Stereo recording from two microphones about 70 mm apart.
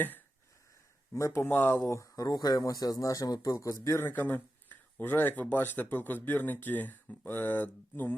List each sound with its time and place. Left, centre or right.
1.1 s speech: left
1.5 s speech: left
3.9 s speech: left